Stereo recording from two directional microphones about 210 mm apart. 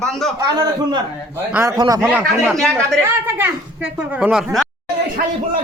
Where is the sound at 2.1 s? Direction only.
Centre (ahead or behind).